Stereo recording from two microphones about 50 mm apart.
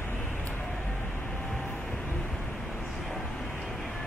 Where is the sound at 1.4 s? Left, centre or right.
Centre.